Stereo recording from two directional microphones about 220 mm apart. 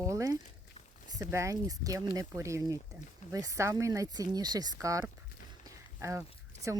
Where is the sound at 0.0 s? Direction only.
15° right (ahead or behind).